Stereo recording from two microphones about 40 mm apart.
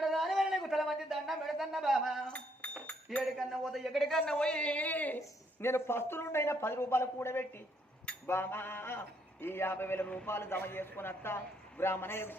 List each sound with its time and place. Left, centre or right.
0.0 s a sound: centre
2.8 s chink: left
3.3 s a man's voice: centre
4.4 s speech: left
5.5 s a man's voice: left
8.3 s a man's voice: left
10.2 s a man's voice: left